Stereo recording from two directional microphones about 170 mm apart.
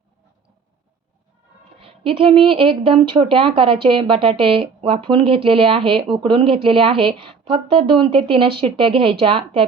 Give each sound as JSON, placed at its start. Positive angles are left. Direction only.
{"t": 1.8, "sound": "speech", "side_deg": -30}